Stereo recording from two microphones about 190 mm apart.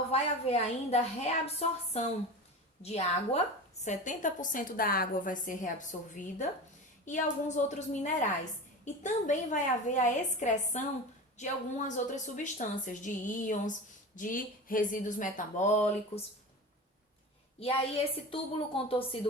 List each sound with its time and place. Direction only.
0.1 s a woman's voice: 35° left (ahead or behind)
17.6 s a woman's voice: 30° left (ahead or behind)